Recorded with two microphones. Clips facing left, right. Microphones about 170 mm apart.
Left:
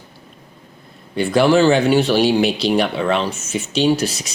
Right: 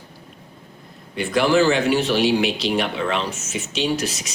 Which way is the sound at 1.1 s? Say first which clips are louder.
Left 4 dB; 30° left (ahead or behind).